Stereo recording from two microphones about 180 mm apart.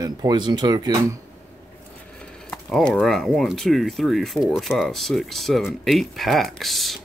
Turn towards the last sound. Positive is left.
turn(degrees=0)  # may be behind; listen again after turning